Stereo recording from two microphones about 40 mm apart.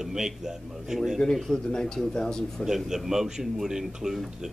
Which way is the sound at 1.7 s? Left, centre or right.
Centre.